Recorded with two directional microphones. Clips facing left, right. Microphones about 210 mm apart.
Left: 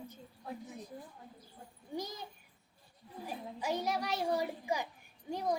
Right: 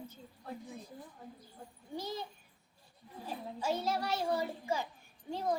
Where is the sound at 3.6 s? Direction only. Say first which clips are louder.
Right 1 dB; 15° left (ahead or behind).